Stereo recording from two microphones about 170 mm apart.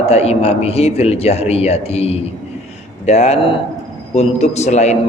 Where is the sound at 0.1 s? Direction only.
40° left (ahead or behind).